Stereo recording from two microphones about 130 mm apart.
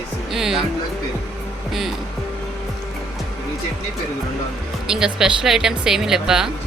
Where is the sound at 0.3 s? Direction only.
5° right (ahead or behind).